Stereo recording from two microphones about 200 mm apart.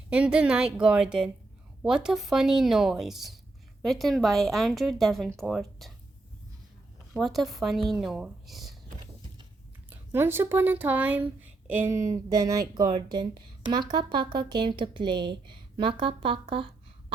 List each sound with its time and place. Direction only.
0.1 s speech: 5° right (ahead or behind)
7.1 s speech: centre (ahead or behind)
9.9 s speech: 10° right (ahead or behind); by 16.6 s 25° right (ahead or behind)